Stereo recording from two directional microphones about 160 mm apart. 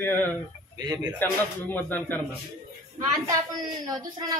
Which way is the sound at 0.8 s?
25° right (ahead or behind).